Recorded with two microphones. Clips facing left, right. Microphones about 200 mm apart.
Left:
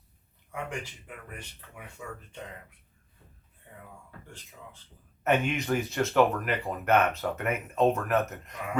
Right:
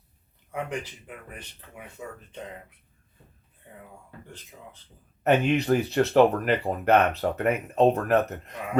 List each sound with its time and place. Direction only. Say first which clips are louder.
0.7 s speech: right 4 dB; 20° right (ahead or behind)
5.2 s speech: right 5 dB; 35° right (ahead or behind)